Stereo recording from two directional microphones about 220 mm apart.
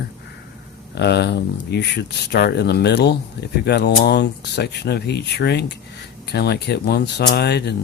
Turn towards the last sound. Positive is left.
turn(degrees=50)  # may be behind; listen again after turning